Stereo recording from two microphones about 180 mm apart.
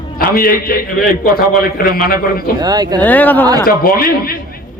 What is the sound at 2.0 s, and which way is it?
Speech, 55° left (ahead or behind).